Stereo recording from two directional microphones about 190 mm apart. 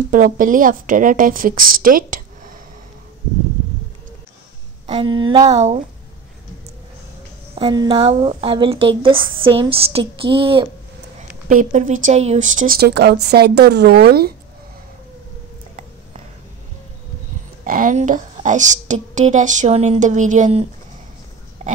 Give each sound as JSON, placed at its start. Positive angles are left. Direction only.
{"t": 0.1, "sound": "speech", "side_deg": -45}
{"t": 4.8, "sound": "speech", "side_deg": -25}
{"t": 7.5, "sound": "speech", "side_deg": -25}
{"t": 11.1, "sound": "speech", "side_deg": -40}
{"t": 17.6, "sound": "a woman's voice", "side_deg": -45}